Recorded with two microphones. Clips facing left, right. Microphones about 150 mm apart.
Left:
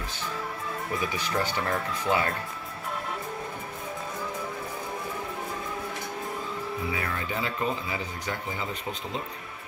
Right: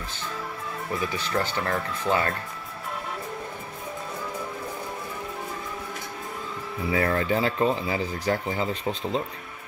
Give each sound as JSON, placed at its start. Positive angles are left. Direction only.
{"t": 1.1, "sound": "speech", "side_deg": 10}
{"t": 6.9, "sound": "speech", "side_deg": -35}